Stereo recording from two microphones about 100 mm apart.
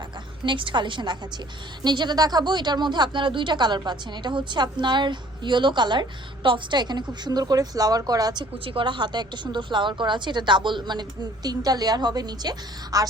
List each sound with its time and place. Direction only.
0.4 s speech: 55° right (ahead or behind)
8.6 s a woman's voice: 55° right (ahead or behind); by 13.1 s 40° right (ahead or behind)